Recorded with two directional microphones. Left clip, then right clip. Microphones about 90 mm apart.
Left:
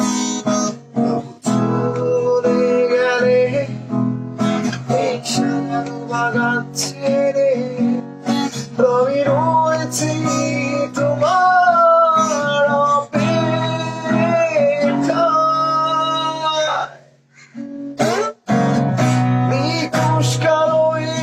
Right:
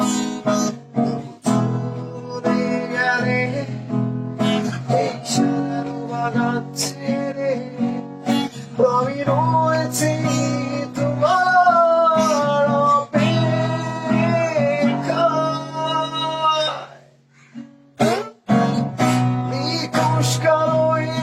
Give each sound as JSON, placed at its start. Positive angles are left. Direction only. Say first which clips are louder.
{"t": 0.0, "sound": "guitar", "louder": "left 1 dB", "side_deg": 35}
{"t": 2.7, "sound": "music", "louder": "left 5 dB", "side_deg": 50}
{"t": 3.9, "sound": "music", "louder": "left 3 dB", "side_deg": 35}
{"t": 17.9, "sound": "music", "louder": "left 2 dB", "side_deg": 35}
{"t": 19.5, "sound": "music", "louder": "left 5 dB", "side_deg": 60}
{"t": 19.9, "sound": "music", "louder": "left 1 dB", "side_deg": 35}